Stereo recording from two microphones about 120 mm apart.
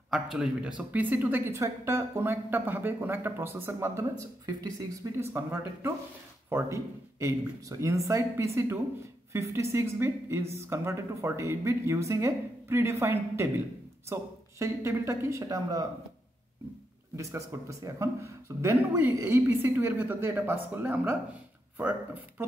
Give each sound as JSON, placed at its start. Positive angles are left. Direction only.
{"t": 0.1, "sound": "a woman's voice", "side_deg": -5}
{"t": 4.5, "sound": "speech", "side_deg": -30}
{"t": 17.2, "sound": "a woman's voice", "side_deg": -25}